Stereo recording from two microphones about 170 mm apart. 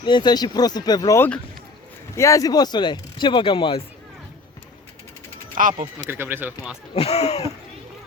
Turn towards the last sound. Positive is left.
turn(degrees=40)  # may be behind; listen again after turning